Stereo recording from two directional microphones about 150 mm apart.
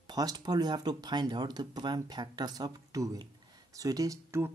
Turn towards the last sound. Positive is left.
turn(degrees=-20)  # may be behind; listen again after turning